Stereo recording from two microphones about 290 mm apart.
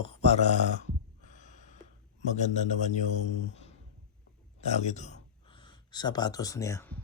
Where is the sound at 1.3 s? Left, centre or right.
Left.